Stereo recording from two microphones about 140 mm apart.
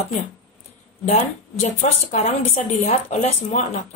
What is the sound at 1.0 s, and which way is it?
A woman's voice, 55° left (ahead or behind).